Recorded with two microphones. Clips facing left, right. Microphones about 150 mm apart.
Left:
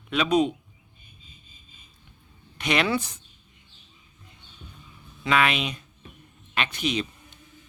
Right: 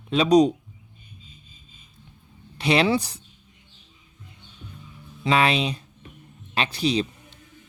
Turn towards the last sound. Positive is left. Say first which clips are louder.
# right 4 dB
turn(degrees=-35)  # may be behind; listen again after turning